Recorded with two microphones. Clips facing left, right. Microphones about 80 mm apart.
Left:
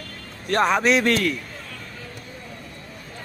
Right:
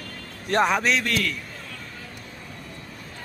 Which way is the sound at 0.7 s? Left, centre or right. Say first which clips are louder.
Left 4 dB; centre.